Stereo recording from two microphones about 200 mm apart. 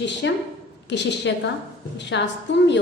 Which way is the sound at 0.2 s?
60° left (ahead or behind).